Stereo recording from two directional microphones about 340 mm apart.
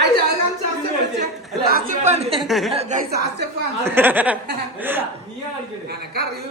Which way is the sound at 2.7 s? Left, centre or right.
Centre.